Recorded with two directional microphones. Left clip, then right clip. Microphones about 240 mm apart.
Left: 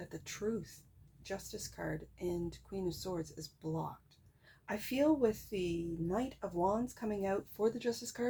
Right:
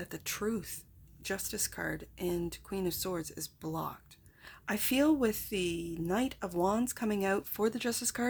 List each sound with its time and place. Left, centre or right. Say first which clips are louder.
0.0 s a woman's voice: right 4 dB; right